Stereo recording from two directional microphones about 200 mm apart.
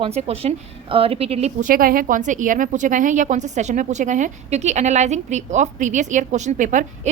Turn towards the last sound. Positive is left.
turn(degrees=-40)  # may be behind; listen again after turning